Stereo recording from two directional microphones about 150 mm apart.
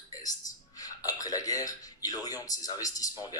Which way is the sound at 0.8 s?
25° left (ahead or behind).